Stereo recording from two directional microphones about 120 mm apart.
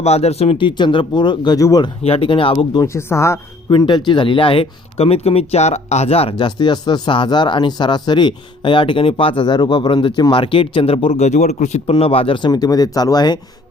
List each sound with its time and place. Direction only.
0.0 s speech: 60° left (ahead or behind); by 1.9 s 30° left (ahead or behind)
2.0 s speech: 50° left (ahead or behind)
2.7 s speech: 25° left (ahead or behind)
3.7 s speech: 40° left (ahead or behind); by 6.3 s 55° left (ahead or behind)
6.3 s speech: 40° left (ahead or behind)
12.5 s speech: 30° left (ahead or behind)